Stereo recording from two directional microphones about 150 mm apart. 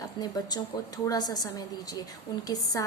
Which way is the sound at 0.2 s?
25° left (ahead or behind).